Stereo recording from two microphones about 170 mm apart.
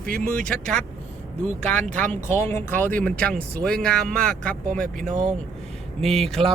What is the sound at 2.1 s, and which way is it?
Speech, 45° right (ahead or behind).